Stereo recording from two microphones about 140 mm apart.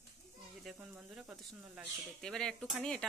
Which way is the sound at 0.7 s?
10° right (ahead or behind).